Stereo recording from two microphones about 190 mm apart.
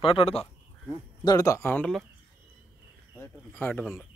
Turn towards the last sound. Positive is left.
turn(degrees=10)  # may be behind; listen again after turning